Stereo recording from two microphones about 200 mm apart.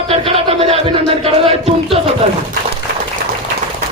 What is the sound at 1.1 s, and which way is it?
Speech, 30° right (ahead or behind).